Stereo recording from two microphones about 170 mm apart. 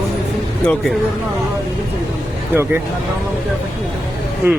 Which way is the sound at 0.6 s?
5° left (ahead or behind).